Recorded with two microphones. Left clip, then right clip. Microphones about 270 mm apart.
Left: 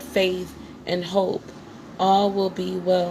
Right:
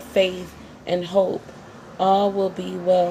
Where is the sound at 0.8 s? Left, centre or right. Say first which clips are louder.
Right 3 dB; left.